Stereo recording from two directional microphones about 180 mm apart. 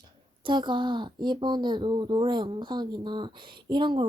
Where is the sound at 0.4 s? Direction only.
25° right (ahead or behind).